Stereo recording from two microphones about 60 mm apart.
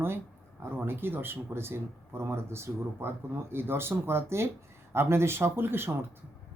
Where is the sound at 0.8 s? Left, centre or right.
Right.